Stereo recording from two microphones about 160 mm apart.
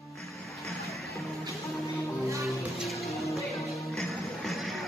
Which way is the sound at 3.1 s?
20° left (ahead or behind).